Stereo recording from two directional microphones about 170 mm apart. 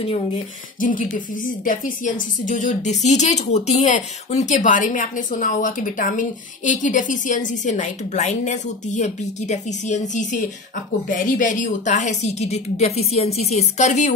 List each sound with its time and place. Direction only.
0.7 s a woman's voice: 50° left (ahead or behind)